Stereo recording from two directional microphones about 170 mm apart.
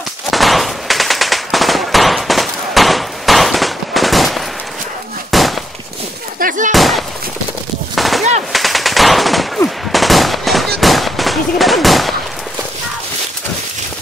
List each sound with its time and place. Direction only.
0.3 s machine gun: centre (ahead or behind)
5.3 s wood: centre (ahead or behind)
6.4 s a sound: 50° right (ahead or behind)
6.7 s a sound: centre (ahead or behind)
7.9 s gunshot: centre (ahead or behind)
8.5 s machine gun: centre (ahead or behind)
10.8 s gunshot: centre (ahead or behind)